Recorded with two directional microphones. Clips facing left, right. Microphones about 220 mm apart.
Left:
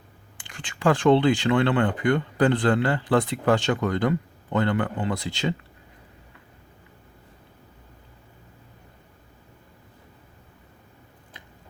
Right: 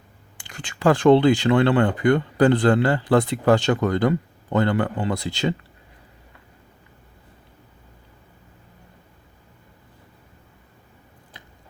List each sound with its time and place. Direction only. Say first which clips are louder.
0.3 s speech: right 3 dB; 40° right (ahead or behind)